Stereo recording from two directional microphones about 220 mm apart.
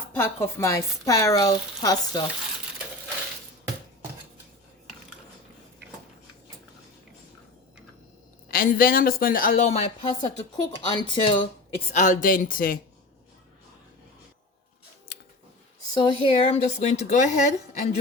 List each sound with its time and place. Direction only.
0.2 s speech: 10° left (ahead or behind)
8.4 s speech: 40° left (ahead or behind); by 11.4 s 20° left (ahead or behind)
11.9 s speech: 35° left (ahead or behind)
16.0 s speech: 20° left (ahead or behind)